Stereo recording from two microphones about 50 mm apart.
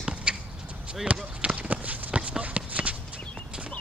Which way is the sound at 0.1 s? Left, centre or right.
Centre.